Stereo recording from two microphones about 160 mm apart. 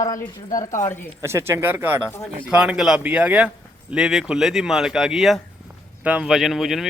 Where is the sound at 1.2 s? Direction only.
15° right (ahead or behind).